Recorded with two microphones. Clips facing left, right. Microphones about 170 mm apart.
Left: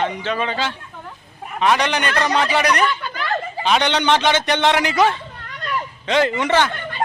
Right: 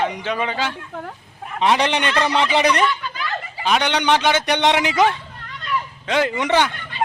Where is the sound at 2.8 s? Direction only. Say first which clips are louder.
Left 1 dB; 55° left (ahead or behind).